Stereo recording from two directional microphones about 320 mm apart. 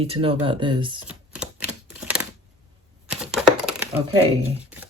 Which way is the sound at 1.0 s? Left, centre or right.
Centre.